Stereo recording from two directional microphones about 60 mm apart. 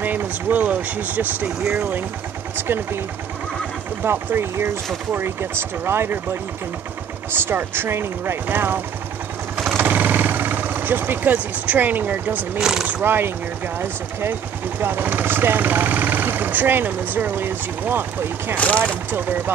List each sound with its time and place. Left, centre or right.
0.0 s speech: right
2.5 s speech: right
4.0 s speech: right
7.3 s speech: right
9.8 s vehicle: right
12.5 s speech: centre
12.8 s speech: right
14.8 s speech: right
18.6 s speech: left
19.0 s speech: right